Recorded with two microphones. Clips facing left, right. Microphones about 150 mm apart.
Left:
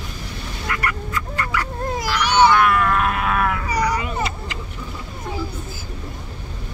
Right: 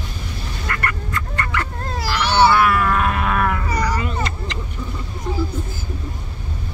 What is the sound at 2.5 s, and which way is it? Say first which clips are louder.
Cat: even; 5° right (ahead or behind).